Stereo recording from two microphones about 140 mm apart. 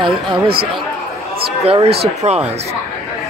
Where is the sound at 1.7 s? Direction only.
45° right (ahead or behind).